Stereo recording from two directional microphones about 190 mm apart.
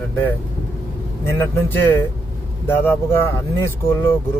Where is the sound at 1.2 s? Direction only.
10° left (ahead or behind).